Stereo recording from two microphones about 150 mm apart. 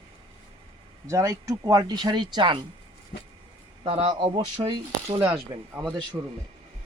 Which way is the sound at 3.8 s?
40° right (ahead or behind).